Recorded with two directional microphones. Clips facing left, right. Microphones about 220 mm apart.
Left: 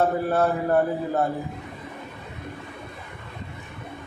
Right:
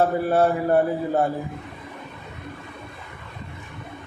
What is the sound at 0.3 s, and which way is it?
Speech, 30° right (ahead or behind).